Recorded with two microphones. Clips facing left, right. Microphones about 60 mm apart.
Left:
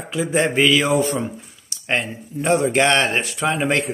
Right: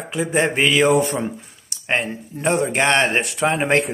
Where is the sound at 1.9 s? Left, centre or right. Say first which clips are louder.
Right 1 dB; right.